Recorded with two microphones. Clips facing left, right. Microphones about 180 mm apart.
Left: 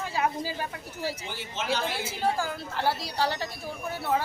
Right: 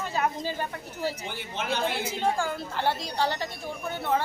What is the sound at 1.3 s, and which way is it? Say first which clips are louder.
Speech: even; 55° right (ahead or behind).